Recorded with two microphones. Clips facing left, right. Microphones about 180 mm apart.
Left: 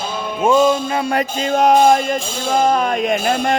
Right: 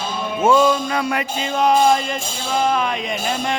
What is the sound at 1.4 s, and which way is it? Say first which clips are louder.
Speech: left 3 dB; 45° left (ahead or behind).